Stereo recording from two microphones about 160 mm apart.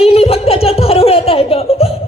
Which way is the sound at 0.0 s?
40° left (ahead or behind).